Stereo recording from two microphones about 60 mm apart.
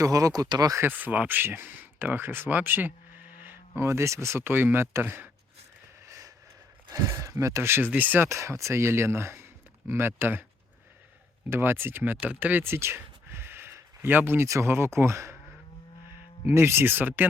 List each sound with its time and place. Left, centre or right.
0.0 s speech: right
0.8 s speech: right
3.8 s speech: right
6.1 s a sound: right
6.9 s speech: right
8.3 s speech: right
11.5 s speech: right
12.3 s a sound: right
14.0 s speech: right
14.4 s speech: right
16.6 s speech: right